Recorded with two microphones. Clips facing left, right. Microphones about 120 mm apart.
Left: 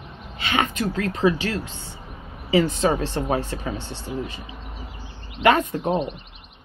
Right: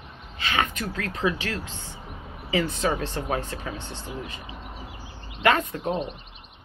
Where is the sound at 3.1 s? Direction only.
15° left (ahead or behind).